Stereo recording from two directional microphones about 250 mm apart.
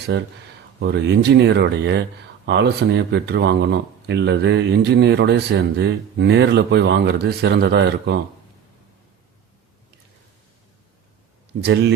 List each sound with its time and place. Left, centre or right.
0.1 s speech: right
11.6 s speech: right